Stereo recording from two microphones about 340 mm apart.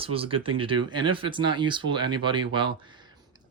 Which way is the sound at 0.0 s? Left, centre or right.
Centre.